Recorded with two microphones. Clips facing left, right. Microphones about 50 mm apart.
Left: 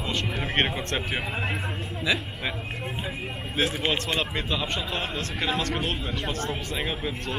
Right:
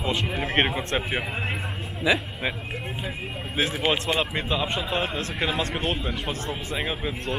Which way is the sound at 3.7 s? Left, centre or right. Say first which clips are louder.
Right 3 dB; centre.